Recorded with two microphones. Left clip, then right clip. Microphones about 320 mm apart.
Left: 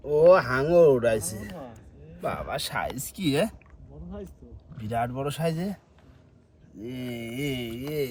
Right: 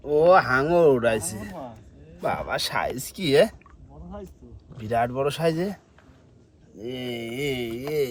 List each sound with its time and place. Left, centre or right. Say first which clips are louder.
0.0 s a man's voice: right 1 dB; centre
4.8 s speech: right 5 dB; right